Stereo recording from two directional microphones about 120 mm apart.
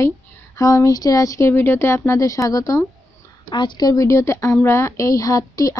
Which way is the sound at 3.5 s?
40° left (ahead or behind).